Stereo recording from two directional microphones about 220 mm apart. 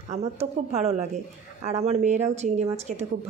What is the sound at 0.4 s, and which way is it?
A woman's voice, 30° right (ahead or behind).